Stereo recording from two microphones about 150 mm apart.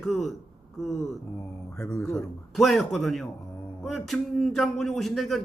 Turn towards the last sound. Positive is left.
turn(degrees=0)  # may be behind; listen again after turning